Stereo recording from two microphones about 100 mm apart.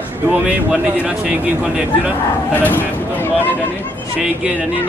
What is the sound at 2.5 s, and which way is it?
Speech, 20° left (ahead or behind).